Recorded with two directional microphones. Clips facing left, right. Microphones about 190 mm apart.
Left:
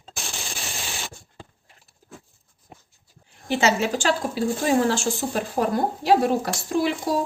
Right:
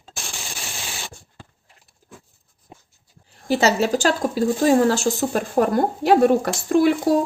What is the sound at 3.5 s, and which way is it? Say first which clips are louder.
Speech: right 3 dB; 35° right (ahead or behind).